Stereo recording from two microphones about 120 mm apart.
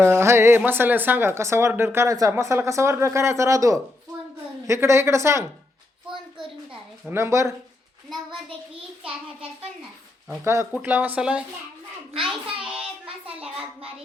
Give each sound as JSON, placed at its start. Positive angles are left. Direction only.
{"t": 0.0, "sound": "a woman's voice", "side_deg": -20}
{"t": 7.1, "sound": "a woman's voice", "side_deg": -25}
{"t": 10.4, "sound": "a woman's voice", "side_deg": -25}
{"t": 10.7, "sound": "speech", "side_deg": -10}
{"t": 12.5, "sound": "child singing", "side_deg": -5}